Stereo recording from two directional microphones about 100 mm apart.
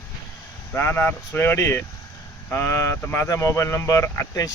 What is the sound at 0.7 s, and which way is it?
Speech, 25° left (ahead or behind).